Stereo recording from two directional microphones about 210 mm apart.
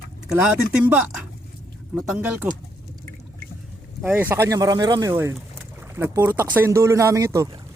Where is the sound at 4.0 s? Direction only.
5° right (ahead or behind).